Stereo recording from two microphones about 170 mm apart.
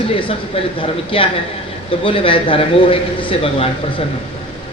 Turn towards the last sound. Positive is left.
turn(degrees=30)  # may be behind; listen again after turning